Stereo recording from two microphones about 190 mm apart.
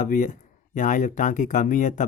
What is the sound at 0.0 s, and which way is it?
Speech, 40° left (ahead or behind).